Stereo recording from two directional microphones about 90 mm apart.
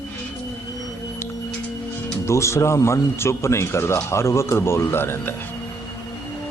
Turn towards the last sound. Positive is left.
turn(degrees=25)  # may be behind; listen again after turning